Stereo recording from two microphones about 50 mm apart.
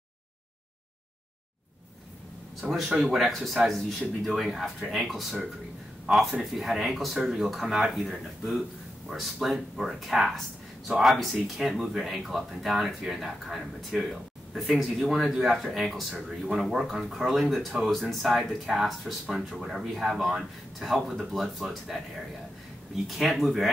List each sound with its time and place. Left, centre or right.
2.6 s speech: right
3.0 s speech: centre